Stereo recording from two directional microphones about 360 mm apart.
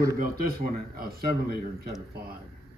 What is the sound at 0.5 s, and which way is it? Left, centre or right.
Speech, right.